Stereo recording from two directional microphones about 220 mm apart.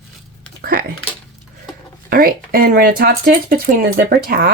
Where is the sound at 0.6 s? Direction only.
40° right (ahead or behind).